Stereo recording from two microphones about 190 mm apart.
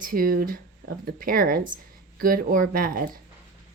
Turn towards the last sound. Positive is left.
turn(degrees=-50)  # may be behind; listen again after turning